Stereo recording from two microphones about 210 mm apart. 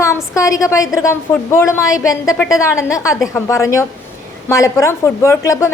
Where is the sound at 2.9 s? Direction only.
15° left (ahead or behind).